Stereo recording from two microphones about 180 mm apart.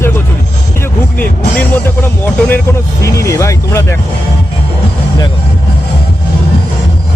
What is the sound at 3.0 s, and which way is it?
Speech, 15° left (ahead or behind).